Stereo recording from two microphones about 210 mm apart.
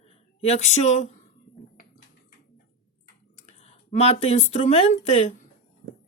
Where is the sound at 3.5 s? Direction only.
30° left (ahead or behind).